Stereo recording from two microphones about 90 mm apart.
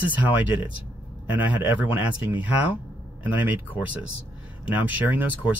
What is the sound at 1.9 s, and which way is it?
Speech, 15° right (ahead or behind).